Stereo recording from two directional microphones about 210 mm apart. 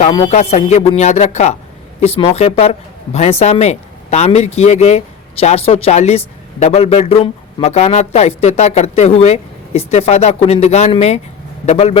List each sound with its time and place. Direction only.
0.3 s speech: 30° left (ahead or behind)